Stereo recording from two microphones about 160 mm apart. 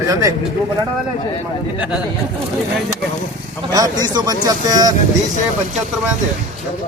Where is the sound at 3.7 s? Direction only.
25° right (ahead or behind).